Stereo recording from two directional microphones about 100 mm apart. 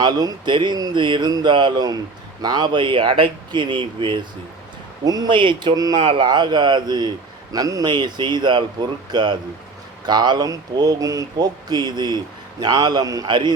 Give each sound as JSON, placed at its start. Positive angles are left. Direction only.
{"t": 0.0, "sound": "speech", "side_deg": -40}
{"t": 5.0, "sound": "speech", "side_deg": -40}
{"t": 5.3, "sound": "speech", "side_deg": -55}
{"t": 5.7, "sound": "speech", "side_deg": -40}
{"t": 6.0, "sound": "speech", "side_deg": -55}
{"t": 13.2, "sound": "speech", "side_deg": -50}